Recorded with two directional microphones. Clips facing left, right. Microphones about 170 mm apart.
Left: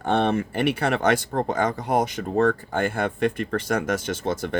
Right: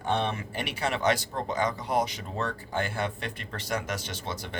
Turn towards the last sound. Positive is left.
turn(degrees=50)  # may be behind; listen again after turning